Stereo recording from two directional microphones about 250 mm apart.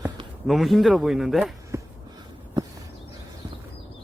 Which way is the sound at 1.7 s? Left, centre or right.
Centre.